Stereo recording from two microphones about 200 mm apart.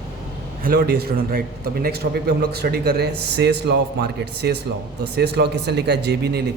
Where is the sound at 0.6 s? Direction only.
50° right (ahead or behind).